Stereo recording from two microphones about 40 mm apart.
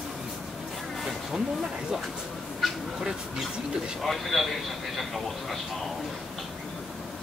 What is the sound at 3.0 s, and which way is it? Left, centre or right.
Speech, centre.